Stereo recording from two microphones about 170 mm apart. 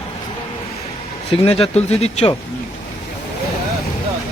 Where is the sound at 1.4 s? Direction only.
35° left (ahead or behind).